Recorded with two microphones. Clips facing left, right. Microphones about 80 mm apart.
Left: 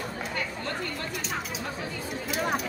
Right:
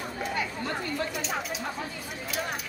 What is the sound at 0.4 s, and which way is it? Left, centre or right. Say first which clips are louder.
Chatter: even; centre.